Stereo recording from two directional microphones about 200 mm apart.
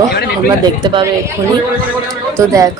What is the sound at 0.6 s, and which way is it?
Speech, 20° right (ahead or behind).